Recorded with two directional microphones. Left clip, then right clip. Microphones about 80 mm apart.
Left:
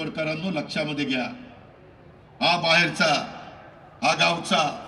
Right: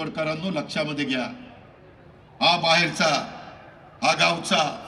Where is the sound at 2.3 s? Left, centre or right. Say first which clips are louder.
Right 1 dB; right.